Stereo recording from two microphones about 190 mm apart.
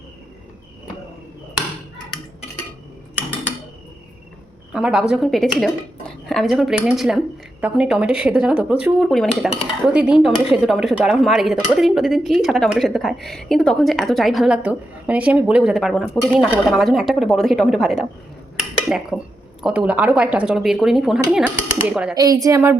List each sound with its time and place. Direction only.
4.7 s a woman's voice: 5° right (ahead or behind)
22.1 s a woman's voice: 20° right (ahead or behind)